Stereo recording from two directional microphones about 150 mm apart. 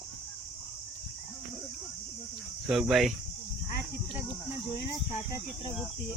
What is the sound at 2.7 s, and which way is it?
Speech, centre (ahead or behind).